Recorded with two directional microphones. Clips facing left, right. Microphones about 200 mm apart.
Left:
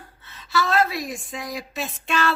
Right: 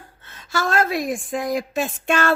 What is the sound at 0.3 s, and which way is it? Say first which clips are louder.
A woman's voice: even; 50° right (ahead or behind).